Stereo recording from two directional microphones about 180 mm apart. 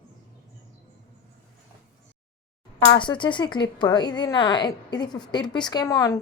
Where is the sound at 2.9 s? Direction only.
25° left (ahead or behind).